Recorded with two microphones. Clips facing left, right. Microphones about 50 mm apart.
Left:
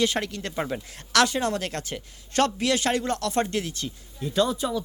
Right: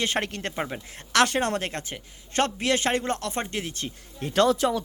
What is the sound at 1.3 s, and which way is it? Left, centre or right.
Speech, right.